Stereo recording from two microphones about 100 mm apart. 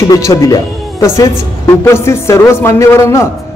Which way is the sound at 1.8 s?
25° left (ahead or behind).